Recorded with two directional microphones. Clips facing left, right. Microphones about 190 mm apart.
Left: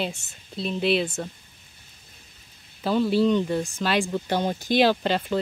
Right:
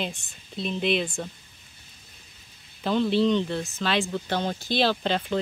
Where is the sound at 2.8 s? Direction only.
5° left (ahead or behind).